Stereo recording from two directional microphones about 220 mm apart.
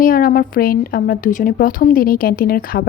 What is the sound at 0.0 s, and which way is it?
A woman's voice, 40° left (ahead or behind).